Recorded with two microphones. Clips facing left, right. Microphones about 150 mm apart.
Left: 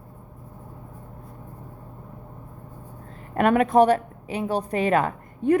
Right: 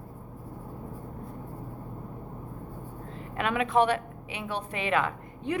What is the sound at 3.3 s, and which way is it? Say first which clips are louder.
A woman's voice: left 8 dB; 50° left (ahead or behind).